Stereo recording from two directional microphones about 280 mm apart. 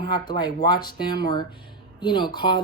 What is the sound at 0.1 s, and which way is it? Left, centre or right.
Speech, centre.